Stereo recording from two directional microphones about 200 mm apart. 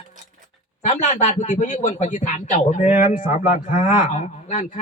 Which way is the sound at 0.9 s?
35° left (ahead or behind).